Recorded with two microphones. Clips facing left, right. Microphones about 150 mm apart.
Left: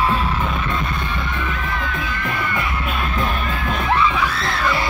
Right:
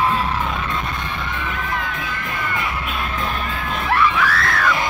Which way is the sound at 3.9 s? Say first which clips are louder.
Right 2 dB; 20° left (ahead or behind).